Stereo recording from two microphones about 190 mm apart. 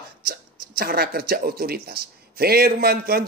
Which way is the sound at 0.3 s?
50° right (ahead or behind).